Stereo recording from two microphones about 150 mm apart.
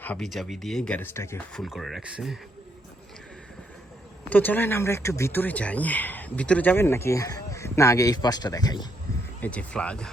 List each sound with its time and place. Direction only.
0.0 s speech: 5° left (ahead or behind)
1.5 s speech: centre (ahead or behind)
4.3 s speech: 10° left (ahead or behind); by 8.9 s 25° left (ahead or behind)
9.4 s speech: 10° left (ahead or behind)